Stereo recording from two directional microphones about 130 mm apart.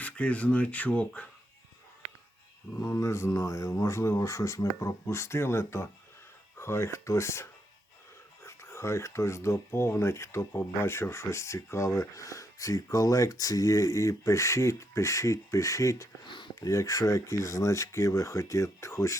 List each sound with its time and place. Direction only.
0.0 s speech: 10° left (ahead or behind)
2.8 s speech: 20° left (ahead or behind)
8.4 s speech: 20° left (ahead or behind)
16.2 s a sound: 35° left (ahead or behind)
16.6 s speech: 25° left (ahead or behind)